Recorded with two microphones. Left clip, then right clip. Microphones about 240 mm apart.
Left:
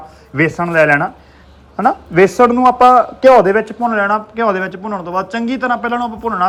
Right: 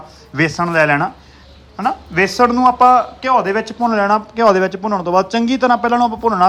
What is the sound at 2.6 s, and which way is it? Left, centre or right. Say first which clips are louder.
Speech: left 1 dB; centre.